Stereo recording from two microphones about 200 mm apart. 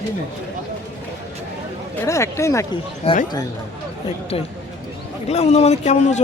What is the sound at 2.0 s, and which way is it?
Speech, 15° left (ahead or behind).